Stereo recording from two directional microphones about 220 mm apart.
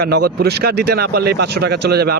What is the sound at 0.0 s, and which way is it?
Speech, 45° right (ahead or behind).